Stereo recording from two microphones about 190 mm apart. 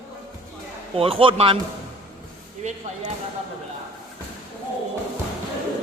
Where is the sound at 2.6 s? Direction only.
40° right (ahead or behind).